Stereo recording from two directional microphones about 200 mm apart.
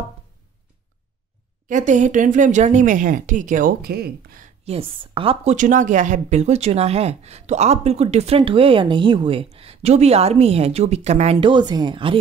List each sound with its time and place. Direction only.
1.7 s speech: 40° right (ahead or behind)
4.6 s speech: 25° right (ahead or behind)